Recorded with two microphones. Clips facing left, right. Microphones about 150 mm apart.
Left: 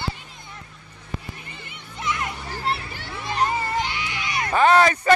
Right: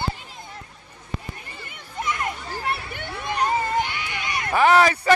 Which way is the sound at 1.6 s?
50° right (ahead or behind).